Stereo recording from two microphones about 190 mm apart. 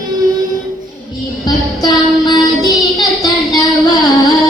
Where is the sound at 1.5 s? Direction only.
20° left (ahead or behind).